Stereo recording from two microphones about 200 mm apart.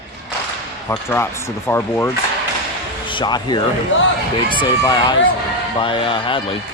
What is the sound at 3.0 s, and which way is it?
Speech, 25° left (ahead or behind).